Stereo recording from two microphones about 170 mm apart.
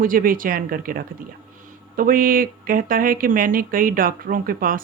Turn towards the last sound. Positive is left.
turn(degrees=-55)  # may be behind; listen again after turning